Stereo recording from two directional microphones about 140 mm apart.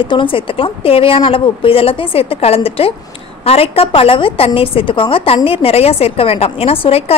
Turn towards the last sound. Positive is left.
turn(degrees=45)  # may be behind; listen again after turning